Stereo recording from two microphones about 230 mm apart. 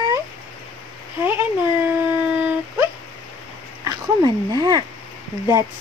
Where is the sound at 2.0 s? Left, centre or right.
Centre.